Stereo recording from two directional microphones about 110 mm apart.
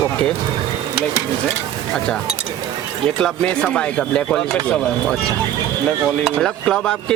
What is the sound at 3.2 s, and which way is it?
Speech, 10° left (ahead or behind).